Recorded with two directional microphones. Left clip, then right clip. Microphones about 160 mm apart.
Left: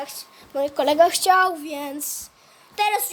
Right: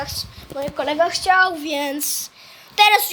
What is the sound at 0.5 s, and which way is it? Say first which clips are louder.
Speech: left 3 dB; 55° left (ahead or behind).